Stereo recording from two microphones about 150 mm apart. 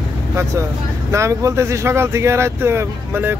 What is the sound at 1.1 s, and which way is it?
Speech, 20° right (ahead or behind).